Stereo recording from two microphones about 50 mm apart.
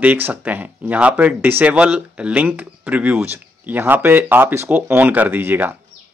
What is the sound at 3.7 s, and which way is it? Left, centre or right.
Speech, right.